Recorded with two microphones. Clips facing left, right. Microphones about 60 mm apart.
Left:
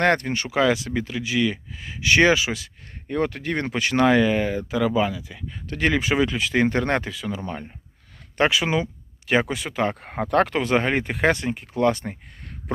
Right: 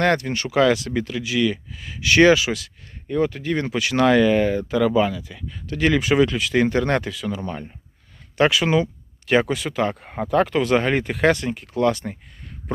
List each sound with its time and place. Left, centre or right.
0.0 s speech: left
3.1 s speech: left
4.0 s speech: centre
5.6 s speech: left
5.9 s speech: left
10.1 s speech: left
10.6 s speech: left
12.7 s speech: left